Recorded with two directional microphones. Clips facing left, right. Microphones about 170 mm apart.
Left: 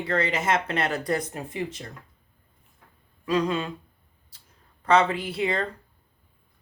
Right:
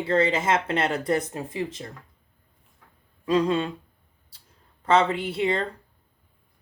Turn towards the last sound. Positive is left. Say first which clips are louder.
# right 2 dB
turn(degrees=-25)  # may be behind; listen again after turning